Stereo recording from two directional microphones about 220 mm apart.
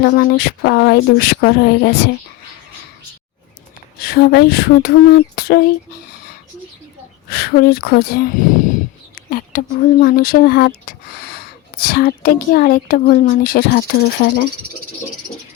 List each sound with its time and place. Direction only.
0.0 s speech: 45° left (ahead or behind)
4.0 s speech: 45° left (ahead or behind)
7.3 s speech: 45° left (ahead or behind)